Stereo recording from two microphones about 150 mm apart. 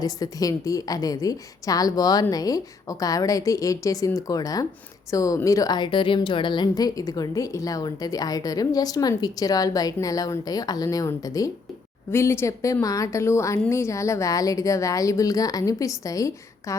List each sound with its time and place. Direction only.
0.0 s speech: 25° left (ahead or behind)